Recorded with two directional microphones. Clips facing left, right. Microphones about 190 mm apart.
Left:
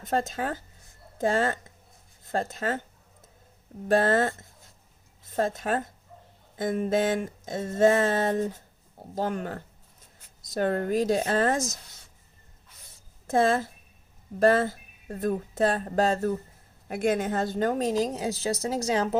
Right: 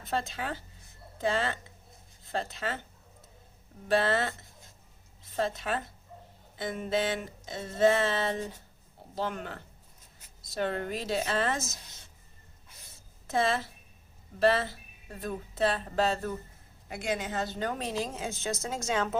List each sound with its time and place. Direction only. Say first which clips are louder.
0.0 s speech: left 5 dB; 45° left (ahead or behind)
3.8 s speech: left 5 dB; 45° left (ahead or behind)
13.2 s a woman's voice: left 5 dB; 45° left (ahead or behind)